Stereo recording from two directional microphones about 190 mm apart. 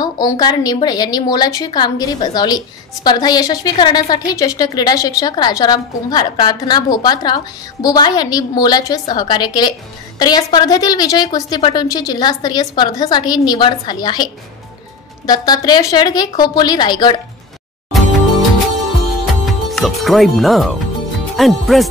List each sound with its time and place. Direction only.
0.0 s a woman's voice: 20° left (ahead or behind)
19.4 s speech: centre (ahead or behind)